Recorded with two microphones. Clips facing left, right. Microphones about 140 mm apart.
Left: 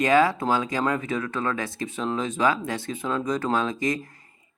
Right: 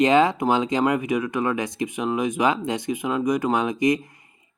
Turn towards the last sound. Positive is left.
turn(degrees=-15)  # may be behind; listen again after turning